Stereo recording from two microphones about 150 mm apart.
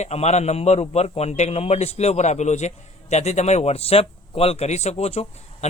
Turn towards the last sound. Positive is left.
turn(degrees=45)  # may be behind; listen again after turning